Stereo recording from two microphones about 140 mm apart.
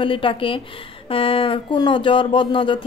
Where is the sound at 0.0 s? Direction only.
40° left (ahead or behind).